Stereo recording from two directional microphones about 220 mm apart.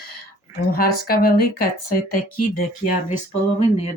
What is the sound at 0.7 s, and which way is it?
A woman's voice, 45° left (ahead or behind).